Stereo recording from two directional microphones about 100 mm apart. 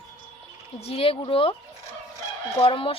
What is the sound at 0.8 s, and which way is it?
Speech, 75° left (ahead or behind).